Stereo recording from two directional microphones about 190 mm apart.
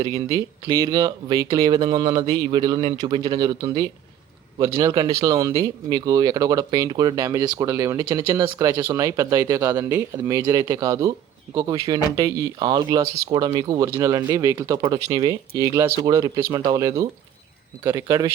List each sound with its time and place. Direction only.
0.0 s speech: 20° right (ahead or behind)